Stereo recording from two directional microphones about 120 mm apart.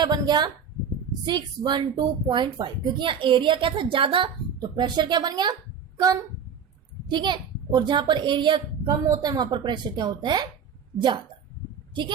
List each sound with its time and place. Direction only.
0.0 s speech: 35° right (ahead or behind)